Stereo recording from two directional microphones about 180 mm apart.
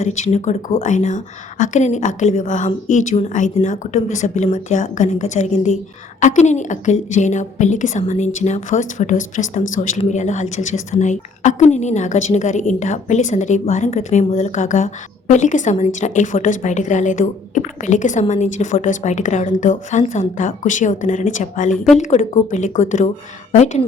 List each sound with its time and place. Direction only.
0.0 s a woman's voice: 40° left (ahead or behind)